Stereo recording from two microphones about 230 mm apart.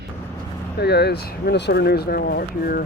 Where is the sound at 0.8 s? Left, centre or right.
Left.